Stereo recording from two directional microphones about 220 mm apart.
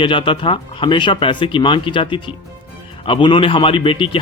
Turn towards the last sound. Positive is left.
turn(degrees=25)  # may be behind; listen again after turning